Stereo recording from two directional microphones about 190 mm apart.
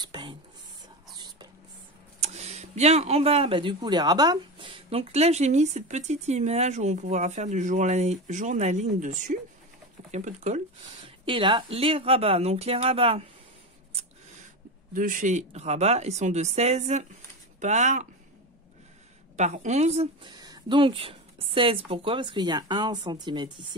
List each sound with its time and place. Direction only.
0.0 s whispering: 25° right (ahead or behind)
1.1 s a sound: 20° right (ahead or behind)
2.2 s speech: 35° right (ahead or behind)
11.2 s speech: 25° right (ahead or behind)
15.0 s speech: 45° right (ahead or behind)
19.3 s speech: 40° right (ahead or behind)
20.3 s speech: 20° right (ahead or behind)